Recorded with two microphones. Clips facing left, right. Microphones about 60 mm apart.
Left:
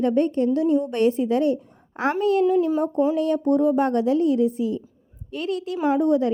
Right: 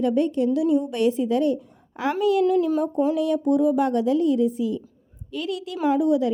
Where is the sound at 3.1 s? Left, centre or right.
Left.